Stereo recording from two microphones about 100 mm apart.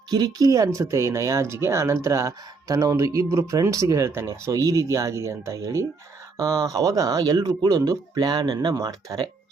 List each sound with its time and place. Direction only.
0.1 s speech: 40° right (ahead or behind)
8.7 s speech: 35° right (ahead or behind)